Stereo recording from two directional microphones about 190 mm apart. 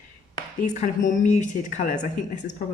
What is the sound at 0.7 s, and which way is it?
Speech, 40° left (ahead or behind).